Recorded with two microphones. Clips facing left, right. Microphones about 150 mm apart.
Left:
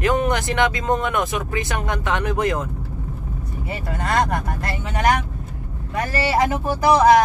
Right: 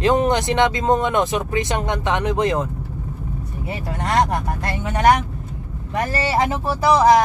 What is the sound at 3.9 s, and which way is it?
Speech, 25° right (ahead or behind).